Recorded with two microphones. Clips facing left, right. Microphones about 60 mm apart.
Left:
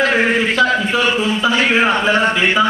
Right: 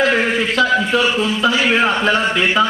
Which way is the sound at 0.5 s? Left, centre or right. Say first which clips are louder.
Even; centre.